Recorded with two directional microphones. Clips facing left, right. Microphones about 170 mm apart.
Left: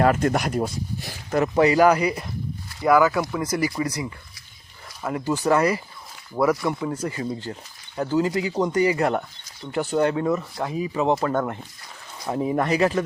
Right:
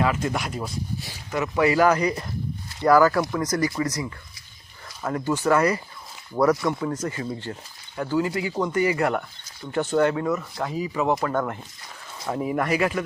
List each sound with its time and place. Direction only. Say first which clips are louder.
0.0 s speech: left 5 dB; 55° left (ahead or behind)
1.6 s speech: left 1 dB; 20° left (ahead or behind)
2.8 s speech: right 1 dB; centre (ahead or behind)
3.4 s speech: even; 25° left (ahead or behind)
5.0 s speech: even; 15° left (ahead or behind)
6.3 s speech: right 1 dB; 5° left (ahead or behind)
7.0 s speech: left 1 dB; 30° left (ahead or behind)